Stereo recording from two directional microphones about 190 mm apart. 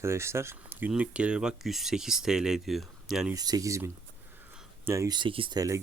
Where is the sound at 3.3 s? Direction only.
20° right (ahead or behind).